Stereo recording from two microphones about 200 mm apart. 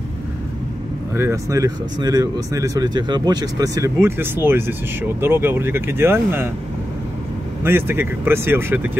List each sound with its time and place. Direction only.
1.1 s speech: 15° right (ahead or behind)
7.6 s speech: 10° right (ahead or behind)